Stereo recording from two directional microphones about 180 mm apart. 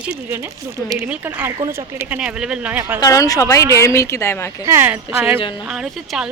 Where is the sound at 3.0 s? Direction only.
20° left (ahead or behind).